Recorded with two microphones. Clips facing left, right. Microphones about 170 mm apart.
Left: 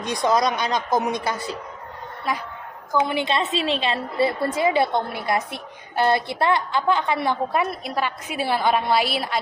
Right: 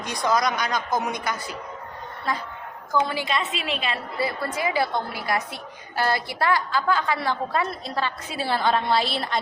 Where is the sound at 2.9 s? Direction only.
20° left (ahead or behind).